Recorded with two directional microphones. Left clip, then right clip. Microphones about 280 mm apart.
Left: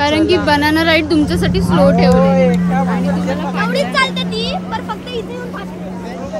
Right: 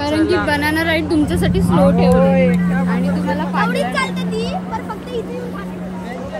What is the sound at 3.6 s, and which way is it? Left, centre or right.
Vehicle, centre.